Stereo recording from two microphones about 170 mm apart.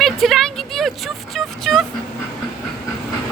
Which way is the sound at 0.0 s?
Centre (ahead or behind).